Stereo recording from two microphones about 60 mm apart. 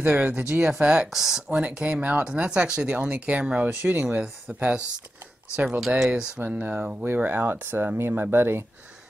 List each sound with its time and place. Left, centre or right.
0.0 s speech: right
1.1 s speech: centre
1.5 s speech: centre
5.8 s speech: centre
6.4 s speech: right
7.2 s speech: right